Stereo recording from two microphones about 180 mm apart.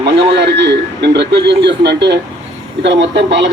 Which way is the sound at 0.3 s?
70° right (ahead or behind).